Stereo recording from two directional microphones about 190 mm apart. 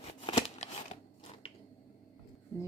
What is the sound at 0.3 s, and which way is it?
Scissors, 35° left (ahead or behind).